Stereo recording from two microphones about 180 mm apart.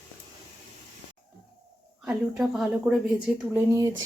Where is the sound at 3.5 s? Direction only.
15° right (ahead or behind).